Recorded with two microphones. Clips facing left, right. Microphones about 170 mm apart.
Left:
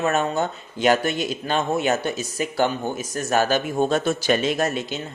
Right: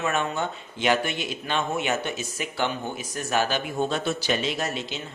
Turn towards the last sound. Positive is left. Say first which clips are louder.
# left 6 dB
turn(degrees=50)  # may be behind; listen again after turning